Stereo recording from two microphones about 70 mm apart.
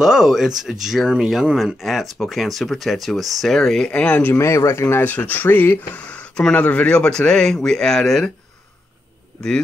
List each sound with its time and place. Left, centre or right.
0.0 s speech: centre
4.1 s speech: left
5.0 s speech: left; by 8.3 s centre